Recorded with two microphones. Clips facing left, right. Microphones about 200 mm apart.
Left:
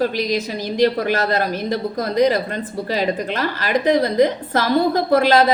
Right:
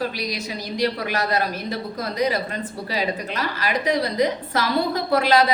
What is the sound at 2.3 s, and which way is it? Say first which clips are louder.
A woman's voice: left 4 dB; 50° left (ahead or behind).